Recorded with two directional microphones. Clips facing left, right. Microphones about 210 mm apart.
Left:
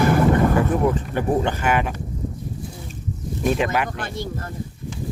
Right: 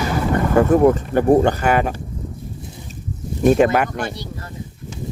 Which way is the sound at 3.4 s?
45° right (ahead or behind).